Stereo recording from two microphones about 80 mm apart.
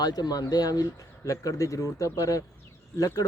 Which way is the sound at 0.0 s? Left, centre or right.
Left.